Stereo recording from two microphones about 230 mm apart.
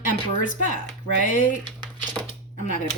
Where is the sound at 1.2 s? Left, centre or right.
Left.